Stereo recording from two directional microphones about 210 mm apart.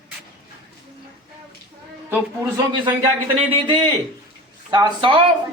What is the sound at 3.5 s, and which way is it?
Speech, 25° right (ahead or behind).